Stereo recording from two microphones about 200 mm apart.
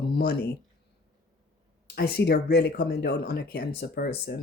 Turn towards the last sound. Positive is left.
turn(degrees=55)  # may be behind; listen again after turning